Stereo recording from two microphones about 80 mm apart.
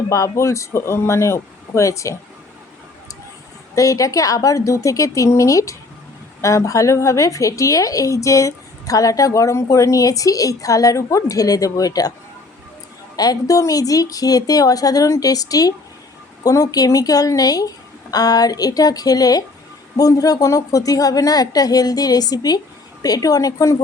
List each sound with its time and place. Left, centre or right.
0.1 s speech: left
3.8 s a woman's voice: left
13.1 s a woman's voice: left